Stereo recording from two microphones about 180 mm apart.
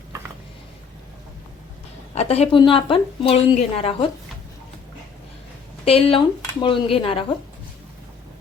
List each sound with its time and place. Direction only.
2.1 s a woman's voice: 35° left (ahead or behind)
5.8 s a woman's voice: 30° left (ahead or behind)